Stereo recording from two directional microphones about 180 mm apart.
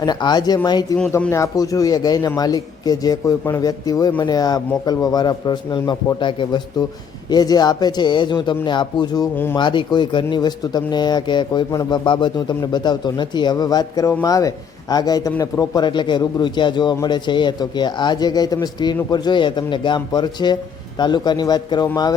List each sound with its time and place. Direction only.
0.0 s a man's voice: 25° left (ahead or behind)
9.3 s speech: 10° left (ahead or behind)
9.6 s a man's voice: 25° left (ahead or behind)